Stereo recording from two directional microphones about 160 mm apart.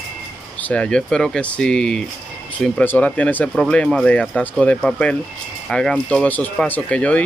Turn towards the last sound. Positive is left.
turn(degrees=10)  # may be behind; listen again after turning